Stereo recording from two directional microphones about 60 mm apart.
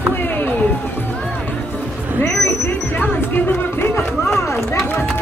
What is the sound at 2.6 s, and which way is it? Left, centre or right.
Speech, left.